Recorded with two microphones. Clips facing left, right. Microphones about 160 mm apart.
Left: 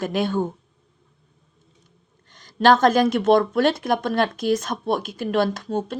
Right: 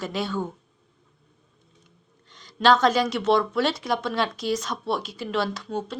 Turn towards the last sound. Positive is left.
turn(degrees=50)  # may be behind; listen again after turning